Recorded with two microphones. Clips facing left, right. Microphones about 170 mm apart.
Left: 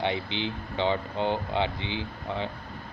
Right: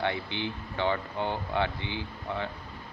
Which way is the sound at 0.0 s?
20° left (ahead or behind).